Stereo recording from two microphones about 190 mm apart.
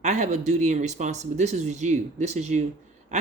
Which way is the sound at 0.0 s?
35° right (ahead or behind).